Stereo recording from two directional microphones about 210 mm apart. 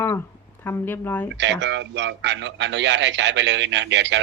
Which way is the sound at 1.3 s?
55° right (ahead or behind).